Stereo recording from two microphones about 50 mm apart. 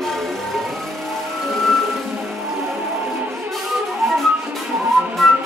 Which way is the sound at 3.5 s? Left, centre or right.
Centre.